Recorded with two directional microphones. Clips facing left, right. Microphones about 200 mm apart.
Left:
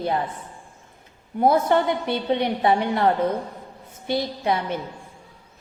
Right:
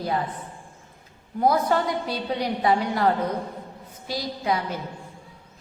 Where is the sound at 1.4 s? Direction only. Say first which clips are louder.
Left 3 dB; 25° left (ahead or behind).